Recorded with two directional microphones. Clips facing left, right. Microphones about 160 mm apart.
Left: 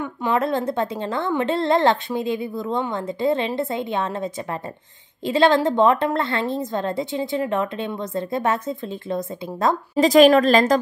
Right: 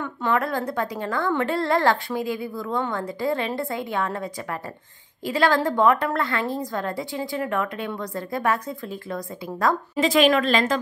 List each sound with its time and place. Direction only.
0.0 s a woman's voice: 15° left (ahead or behind)
9.9 s a woman's voice: 40° left (ahead or behind)